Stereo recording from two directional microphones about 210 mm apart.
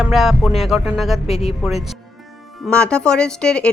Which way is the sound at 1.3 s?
30° left (ahead or behind).